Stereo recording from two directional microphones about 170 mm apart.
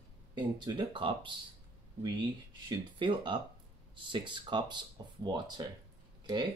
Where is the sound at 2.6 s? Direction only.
30° right (ahead or behind).